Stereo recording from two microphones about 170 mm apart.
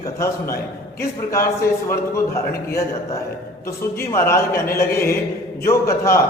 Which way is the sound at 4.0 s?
15° left (ahead or behind).